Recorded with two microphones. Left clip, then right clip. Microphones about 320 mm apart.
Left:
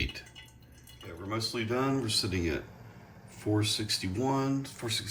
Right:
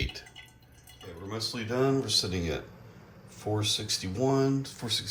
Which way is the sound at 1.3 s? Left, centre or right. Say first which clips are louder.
Left 1 dB; centre.